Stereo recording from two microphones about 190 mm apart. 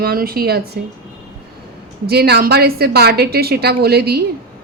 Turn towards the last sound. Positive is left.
turn(degrees=-55)  # may be behind; listen again after turning